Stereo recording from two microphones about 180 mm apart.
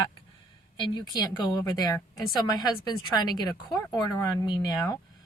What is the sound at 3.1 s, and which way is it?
Speech, 20° left (ahead or behind).